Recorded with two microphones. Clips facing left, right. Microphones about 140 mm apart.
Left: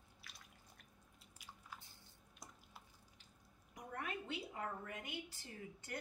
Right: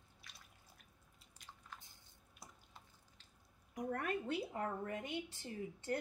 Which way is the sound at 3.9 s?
50° right (ahead or behind).